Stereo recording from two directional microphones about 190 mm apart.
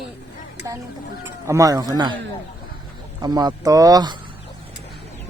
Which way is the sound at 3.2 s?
20° right (ahead or behind).